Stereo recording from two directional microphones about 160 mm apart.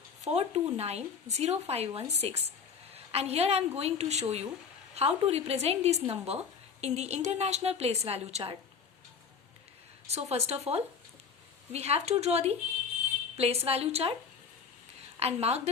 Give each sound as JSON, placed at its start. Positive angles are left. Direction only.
{"t": 0.3, "sound": "a woman's voice", "side_deg": -40}
{"t": 10.1, "sound": "speech", "side_deg": -40}
{"t": 15.2, "sound": "speech", "side_deg": -40}